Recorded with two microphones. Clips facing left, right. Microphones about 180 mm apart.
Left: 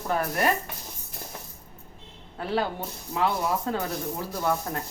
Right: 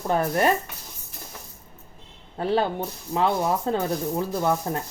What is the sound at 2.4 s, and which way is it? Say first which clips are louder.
Speech: right 4 dB; 30° right (ahead or behind).